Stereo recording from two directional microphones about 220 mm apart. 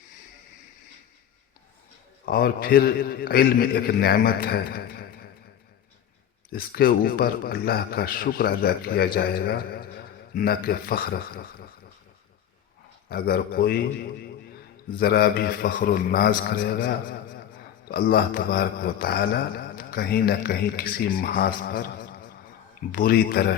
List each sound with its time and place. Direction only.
2.2 s a man's voice: 40° left (ahead or behind)
6.5 s a man's voice: 40° left (ahead or behind)
13.1 s a man's voice: 45° left (ahead or behind)